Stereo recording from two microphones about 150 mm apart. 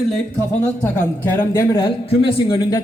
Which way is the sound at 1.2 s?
15° left (ahead or behind).